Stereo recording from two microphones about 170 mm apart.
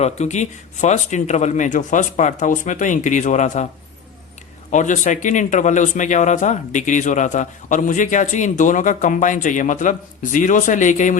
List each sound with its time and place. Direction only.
0.0 s speech: 40° left (ahead or behind)
4.7 s speech: 45° left (ahead or behind)